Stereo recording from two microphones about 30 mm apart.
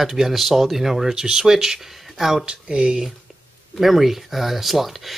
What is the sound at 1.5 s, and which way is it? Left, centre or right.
Speech, centre.